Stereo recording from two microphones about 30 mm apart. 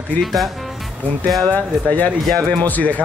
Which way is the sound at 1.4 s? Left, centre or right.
Left.